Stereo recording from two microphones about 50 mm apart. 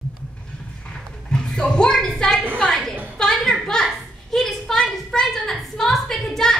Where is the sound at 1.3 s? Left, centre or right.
Centre.